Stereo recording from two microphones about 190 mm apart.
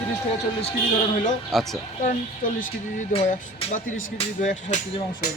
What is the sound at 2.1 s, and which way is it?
Speech, 45° left (ahead or behind).